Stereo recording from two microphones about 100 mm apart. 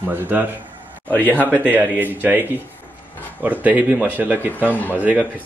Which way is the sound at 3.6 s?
15° right (ahead or behind).